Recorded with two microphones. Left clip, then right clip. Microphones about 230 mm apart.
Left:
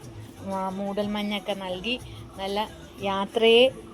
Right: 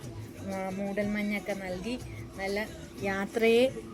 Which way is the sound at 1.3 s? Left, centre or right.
Centre.